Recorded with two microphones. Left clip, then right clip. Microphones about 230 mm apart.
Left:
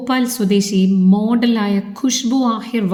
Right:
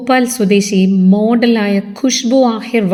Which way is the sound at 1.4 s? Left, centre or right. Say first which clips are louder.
Right 5 dB; left.